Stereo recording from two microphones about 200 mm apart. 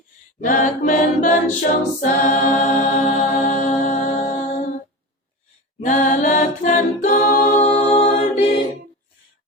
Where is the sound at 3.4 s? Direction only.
40° left (ahead or behind).